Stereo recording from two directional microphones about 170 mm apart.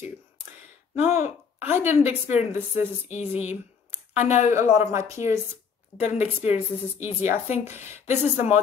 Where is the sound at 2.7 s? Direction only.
40° left (ahead or behind).